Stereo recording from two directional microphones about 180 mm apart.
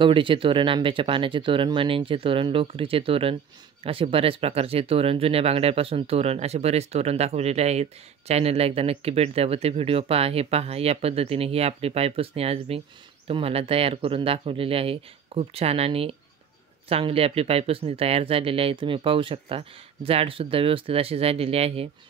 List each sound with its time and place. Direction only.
0.0 s speech: 30° right (ahead or behind)